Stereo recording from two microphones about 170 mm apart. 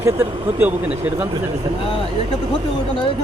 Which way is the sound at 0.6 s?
10° right (ahead or behind).